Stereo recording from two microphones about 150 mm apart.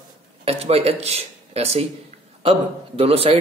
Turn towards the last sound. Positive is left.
turn(degrees=-40)  # may be behind; listen again after turning